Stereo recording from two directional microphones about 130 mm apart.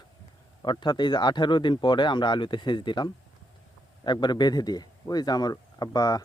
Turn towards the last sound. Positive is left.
turn(degrees=30)  # may be behind; listen again after turning